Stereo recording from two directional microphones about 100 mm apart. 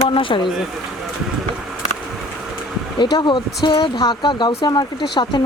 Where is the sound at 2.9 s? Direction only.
50° left (ahead or behind).